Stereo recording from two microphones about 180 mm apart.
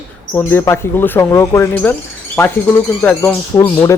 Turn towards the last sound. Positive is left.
turn(degrees=15)  # may be behind; listen again after turning